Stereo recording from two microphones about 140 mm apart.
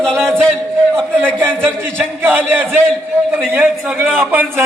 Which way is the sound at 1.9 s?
15° right (ahead or behind).